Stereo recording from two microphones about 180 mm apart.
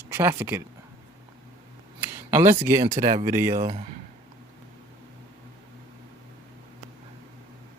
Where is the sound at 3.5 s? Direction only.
35° right (ahead or behind).